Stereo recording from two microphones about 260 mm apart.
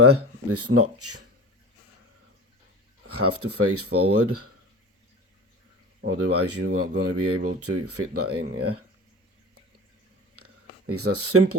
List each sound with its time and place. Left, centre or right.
0.5 s speech: right
3.1 s speech: right
6.1 s speech: right
10.3 s a sound: right